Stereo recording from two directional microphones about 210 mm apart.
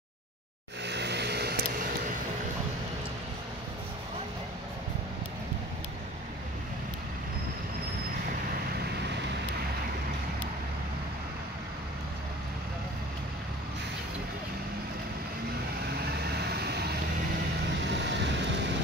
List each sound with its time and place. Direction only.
0.8 s vehicle: 55° right (ahead or behind)
16.1 s vehicle: 50° right (ahead or behind)
18.0 s vehicle: 55° right (ahead or behind)